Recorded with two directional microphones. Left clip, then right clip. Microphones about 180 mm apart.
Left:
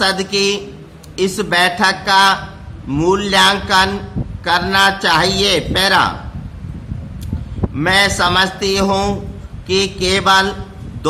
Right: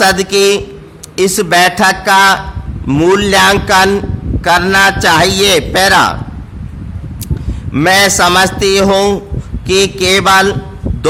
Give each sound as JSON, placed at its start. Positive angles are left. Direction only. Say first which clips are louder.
{"t": 0.0, "sound": "a man's voice", "louder": "right 7 dB", "side_deg": -50}
{"t": 7.7, "sound": "a man's voice", "louder": "right 5 dB", "side_deg": -55}